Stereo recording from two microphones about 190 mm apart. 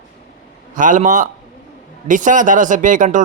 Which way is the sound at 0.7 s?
45° right (ahead or behind).